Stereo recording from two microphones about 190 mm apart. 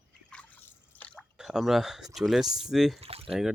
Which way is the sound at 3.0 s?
30° right (ahead or behind).